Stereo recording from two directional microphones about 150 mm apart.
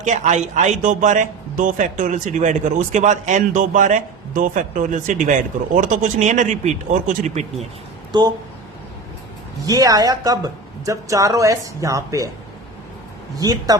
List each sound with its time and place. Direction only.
0.0 s a man's voice: 50° right (ahead or behind)
9.6 s speech: 25° right (ahead or behind)
13.3 s speech: 25° right (ahead or behind)